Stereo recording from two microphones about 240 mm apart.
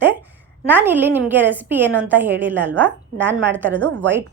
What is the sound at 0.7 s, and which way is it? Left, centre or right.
A woman's voice, centre.